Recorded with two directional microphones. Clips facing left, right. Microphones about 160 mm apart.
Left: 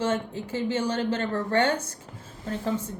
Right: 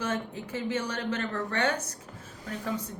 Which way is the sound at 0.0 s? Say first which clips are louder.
Left 5 dB; 30° left (ahead or behind).